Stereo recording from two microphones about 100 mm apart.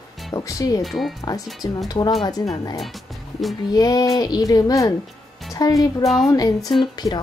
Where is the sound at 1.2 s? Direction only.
40° left (ahead or behind).